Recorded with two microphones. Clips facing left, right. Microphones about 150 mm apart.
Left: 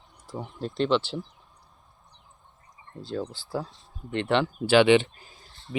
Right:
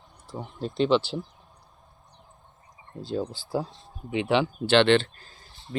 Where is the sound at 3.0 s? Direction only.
15° right (ahead or behind); by 5.3 s 15° left (ahead or behind).